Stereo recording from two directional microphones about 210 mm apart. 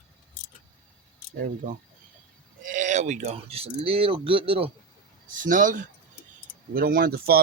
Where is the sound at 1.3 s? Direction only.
45° right (ahead or behind); by 4.7 s 25° right (ahead or behind).